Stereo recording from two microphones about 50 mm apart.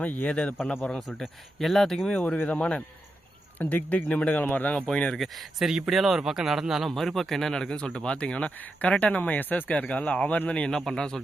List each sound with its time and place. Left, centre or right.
0.0 s a man's voice: left
0.3 s speech: left
1.0 s speech: centre
2.2 s a man's voice: left
3.6 s a man's voice: left
5.1 s speech: centre
5.6 s speech: centre
6.9 s speech: centre; by 10.7 s left
10.7 s speech: centre